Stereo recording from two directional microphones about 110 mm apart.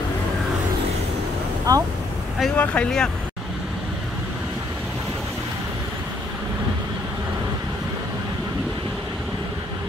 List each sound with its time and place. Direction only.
1.7 s speech: 35° right (ahead or behind)
2.5 s speech: 10° left (ahead or behind)